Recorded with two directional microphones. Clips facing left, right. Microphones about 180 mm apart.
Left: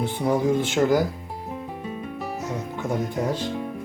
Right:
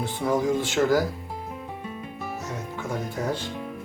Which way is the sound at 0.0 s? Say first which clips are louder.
Left 2 dB; 20° left (ahead or behind).